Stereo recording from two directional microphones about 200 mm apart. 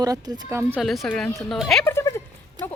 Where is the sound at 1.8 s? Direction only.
15° left (ahead or behind).